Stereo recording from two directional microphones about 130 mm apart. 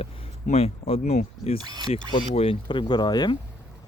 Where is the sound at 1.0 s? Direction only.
60° left (ahead or behind).